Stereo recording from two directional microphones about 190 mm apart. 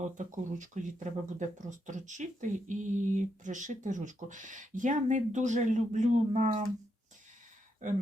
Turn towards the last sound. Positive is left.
turn(degrees=-40)  # may be behind; listen again after turning